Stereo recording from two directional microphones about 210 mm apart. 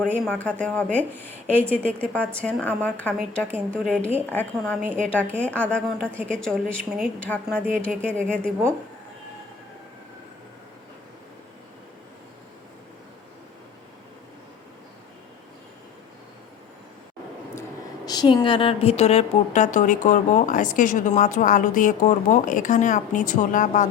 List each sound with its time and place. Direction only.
0.0 s a woman's voice: 5° left (ahead or behind)
18.0 s a woman's voice: 20° left (ahead or behind); by 23.9 s 35° left (ahead or behind)